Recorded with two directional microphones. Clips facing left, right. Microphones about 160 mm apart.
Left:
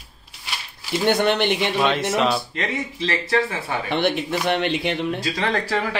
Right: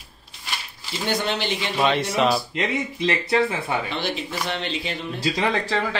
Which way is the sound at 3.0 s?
20° right (ahead or behind).